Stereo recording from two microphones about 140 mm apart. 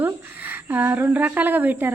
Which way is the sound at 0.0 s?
15° right (ahead or behind).